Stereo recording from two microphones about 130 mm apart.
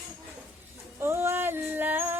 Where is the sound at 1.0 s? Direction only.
20° right (ahead or behind).